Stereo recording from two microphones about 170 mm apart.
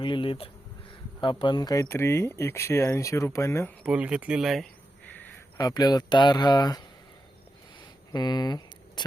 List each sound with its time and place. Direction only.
0.0 s speech: 30° left (ahead or behind)
3.8 s speech: 5° right (ahead or behind); by 5.3 s 10° left (ahead or behind)
5.5 s speech: 20° left (ahead or behind)
8.1 s speech: 25° left (ahead or behind)